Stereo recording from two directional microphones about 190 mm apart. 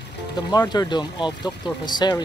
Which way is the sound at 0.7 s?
20° left (ahead or behind).